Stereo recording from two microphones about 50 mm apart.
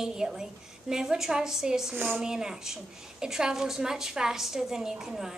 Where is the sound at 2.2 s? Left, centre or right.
Centre.